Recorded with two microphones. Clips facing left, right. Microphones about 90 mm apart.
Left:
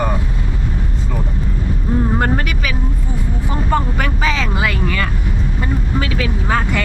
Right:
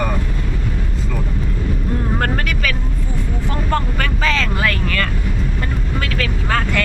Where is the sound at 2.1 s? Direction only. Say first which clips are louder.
Left 2 dB; 15° left (ahead or behind).